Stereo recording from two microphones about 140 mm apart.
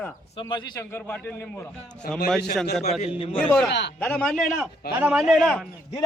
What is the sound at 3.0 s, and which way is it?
Speech, 40° left (ahead or behind).